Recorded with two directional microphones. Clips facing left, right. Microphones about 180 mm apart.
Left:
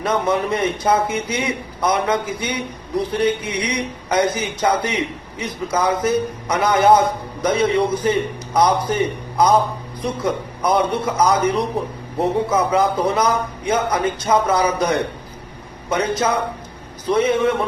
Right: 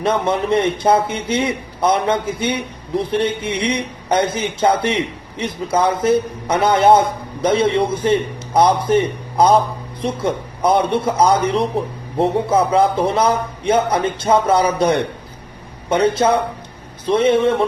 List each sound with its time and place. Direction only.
0.0 s a man's voice: 30° right (ahead or behind)